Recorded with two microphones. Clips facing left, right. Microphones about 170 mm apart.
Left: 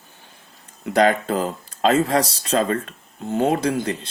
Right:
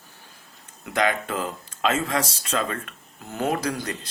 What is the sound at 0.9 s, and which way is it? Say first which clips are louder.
Speech: left 6 dB; 35° left (ahead or behind).